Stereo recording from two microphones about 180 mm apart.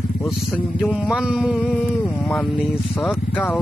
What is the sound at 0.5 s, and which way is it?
Speech, centre (ahead or behind).